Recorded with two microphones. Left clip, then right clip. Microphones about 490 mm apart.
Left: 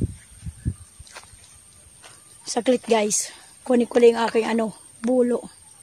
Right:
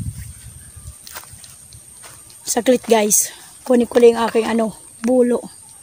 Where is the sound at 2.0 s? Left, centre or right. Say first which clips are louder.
Right 7 dB; left.